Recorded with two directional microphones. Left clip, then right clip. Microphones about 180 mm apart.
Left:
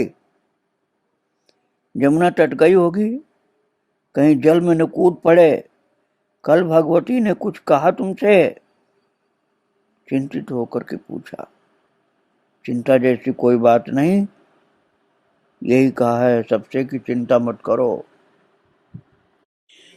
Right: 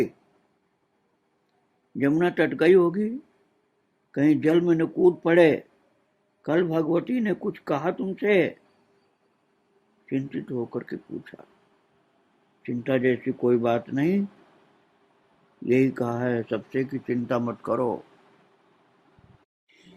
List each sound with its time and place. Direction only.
2.0 s speech: 50° left (ahead or behind)
4.1 s speech: 50° left (ahead or behind)
10.1 s speech: 50° left (ahead or behind)
12.6 s speech: 50° left (ahead or behind)
15.6 s speech: 50° left (ahead or behind)
17.6 s speech: 25° left (ahead or behind)